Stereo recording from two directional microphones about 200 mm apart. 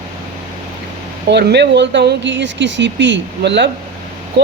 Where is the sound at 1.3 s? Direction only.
60° right (ahead or behind).